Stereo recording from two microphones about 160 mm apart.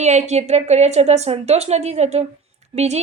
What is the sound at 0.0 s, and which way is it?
A woman's voice, 45° right (ahead or behind).